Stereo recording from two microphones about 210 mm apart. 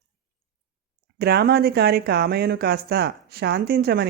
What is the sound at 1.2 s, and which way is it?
Speech, 50° right (ahead or behind).